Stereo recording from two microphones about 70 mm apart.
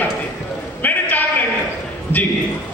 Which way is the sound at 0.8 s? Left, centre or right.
Left.